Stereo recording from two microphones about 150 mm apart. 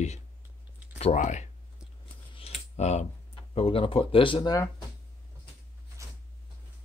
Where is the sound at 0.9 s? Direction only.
50° left (ahead or behind).